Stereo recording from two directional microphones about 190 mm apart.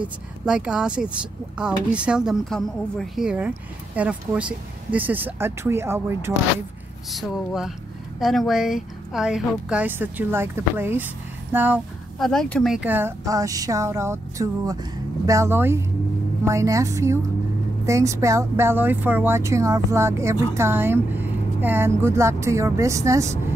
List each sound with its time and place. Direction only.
0.5 s speech: 5° right (ahead or behind)
7.1 s speech: centre (ahead or behind)
12.2 s speech: 5° left (ahead or behind); by 23.4 s 15° right (ahead or behind)